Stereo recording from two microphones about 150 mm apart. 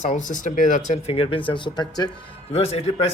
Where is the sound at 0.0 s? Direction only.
55° left (ahead or behind); by 2.0 s 30° left (ahead or behind).